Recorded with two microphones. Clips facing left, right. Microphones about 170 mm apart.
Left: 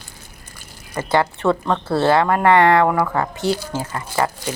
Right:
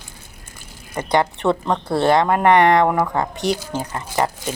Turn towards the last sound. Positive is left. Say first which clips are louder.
# even
turn(degrees=-15)  # may be behind; listen again after turning